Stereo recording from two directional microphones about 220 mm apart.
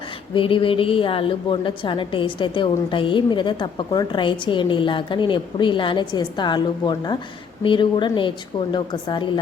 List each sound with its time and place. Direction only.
0.3 s a woman's voice: 25° left (ahead or behind)